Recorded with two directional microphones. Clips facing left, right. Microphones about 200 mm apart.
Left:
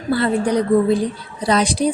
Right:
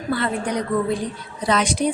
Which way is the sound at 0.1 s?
35° left (ahead or behind).